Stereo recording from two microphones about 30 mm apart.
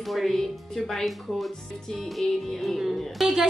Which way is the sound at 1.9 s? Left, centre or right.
Centre.